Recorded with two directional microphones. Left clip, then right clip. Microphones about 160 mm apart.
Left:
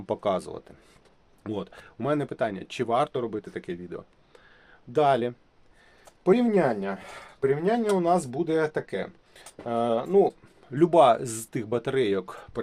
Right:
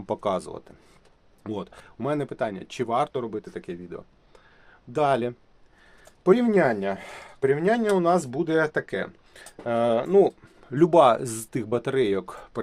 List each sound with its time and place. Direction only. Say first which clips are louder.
0.0 s speech: even; 10° right (ahead or behind)
4.9 s speech: left 1 dB; 25° right (ahead or behind)
6.2 s speech: right 2 dB; 40° right (ahead or behind)
10.7 s speech: right 1 dB; 40° right (ahead or behind)